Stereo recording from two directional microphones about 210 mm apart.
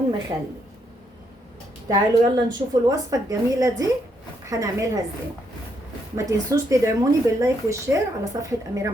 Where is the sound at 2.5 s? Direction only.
15° right (ahead or behind).